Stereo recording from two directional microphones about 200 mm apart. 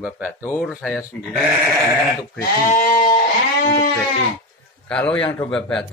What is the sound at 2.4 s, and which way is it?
Speech, 40° left (ahead or behind).